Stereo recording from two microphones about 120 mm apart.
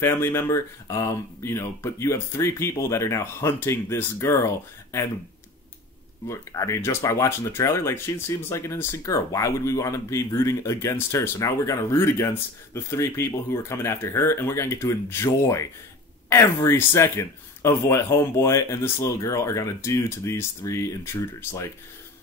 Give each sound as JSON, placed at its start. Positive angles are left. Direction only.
{"t": 0.0, "sound": "speech", "side_deg": 20}
{"t": 6.2, "sound": "speech", "side_deg": 25}